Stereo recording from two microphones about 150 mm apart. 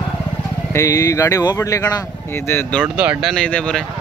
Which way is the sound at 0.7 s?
20° left (ahead or behind).